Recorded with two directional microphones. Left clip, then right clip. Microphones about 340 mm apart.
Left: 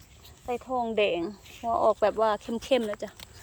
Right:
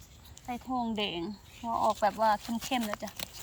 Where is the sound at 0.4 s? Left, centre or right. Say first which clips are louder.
Left 5 dB; centre.